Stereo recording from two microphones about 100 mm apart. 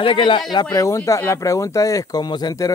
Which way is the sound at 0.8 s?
30° left (ahead or behind).